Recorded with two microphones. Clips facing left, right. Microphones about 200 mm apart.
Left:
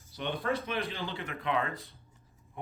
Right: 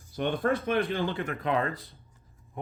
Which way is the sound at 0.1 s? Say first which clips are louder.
Right 5 dB; 50° right (ahead or behind).